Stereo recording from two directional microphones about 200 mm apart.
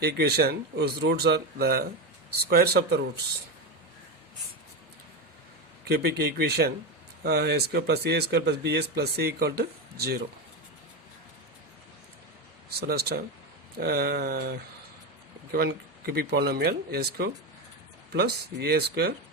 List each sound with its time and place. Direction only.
0.0 s speech: 55° right (ahead or behind)
5.9 s speech: 55° right (ahead or behind)
12.9 s speech: 55° right (ahead or behind)